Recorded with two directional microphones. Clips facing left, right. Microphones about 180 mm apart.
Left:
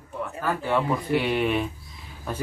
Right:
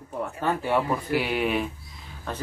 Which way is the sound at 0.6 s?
10° right (ahead or behind).